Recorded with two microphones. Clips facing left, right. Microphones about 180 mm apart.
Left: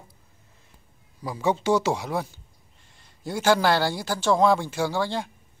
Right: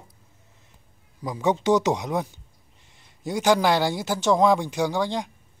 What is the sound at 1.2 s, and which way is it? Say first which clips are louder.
A man's voice: right 2 dB; 20° right (ahead or behind).